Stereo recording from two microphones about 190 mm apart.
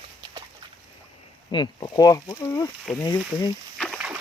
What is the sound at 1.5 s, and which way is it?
Speech, 25° left (ahead or behind).